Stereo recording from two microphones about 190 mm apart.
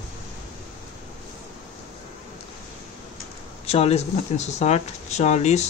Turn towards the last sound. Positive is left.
turn(degrees=35)  # may be behind; listen again after turning